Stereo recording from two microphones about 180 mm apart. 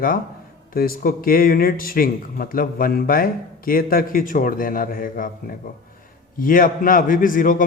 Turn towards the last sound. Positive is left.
turn(degrees=50)  # may be behind; listen again after turning